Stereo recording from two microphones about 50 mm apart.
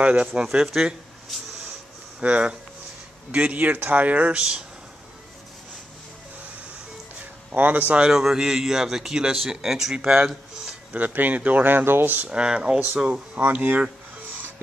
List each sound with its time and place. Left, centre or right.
0.0 s speech: right
0.3 s speech: centre
2.1 s speech: right
4.4 s speech: centre
7.5 s speech: right
8.0 s speech: centre
11.1 s speech: right
12.3 s speech: centre
13.4 s speech: right